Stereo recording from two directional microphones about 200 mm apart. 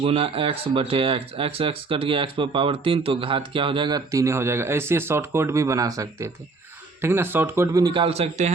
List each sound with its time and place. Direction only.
0.0 s a man's voice: 30° right (ahead or behind)